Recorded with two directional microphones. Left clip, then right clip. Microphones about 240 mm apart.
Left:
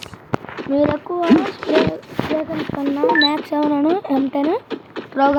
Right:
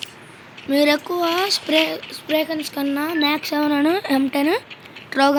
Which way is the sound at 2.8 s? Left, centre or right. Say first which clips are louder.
Left 2 dB; centre.